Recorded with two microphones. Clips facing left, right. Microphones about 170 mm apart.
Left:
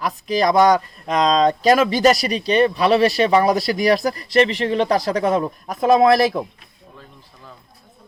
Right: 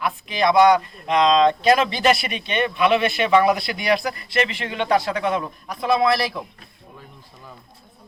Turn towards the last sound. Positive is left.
turn(degrees=45)  # may be behind; listen again after turning